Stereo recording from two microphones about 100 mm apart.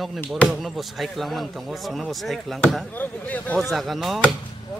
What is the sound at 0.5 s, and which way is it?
Speech, centre (ahead or behind).